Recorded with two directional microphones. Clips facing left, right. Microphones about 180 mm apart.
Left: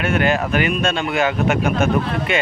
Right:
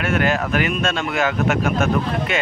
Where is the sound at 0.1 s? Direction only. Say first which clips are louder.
Left 1 dB; centre (ahead or behind).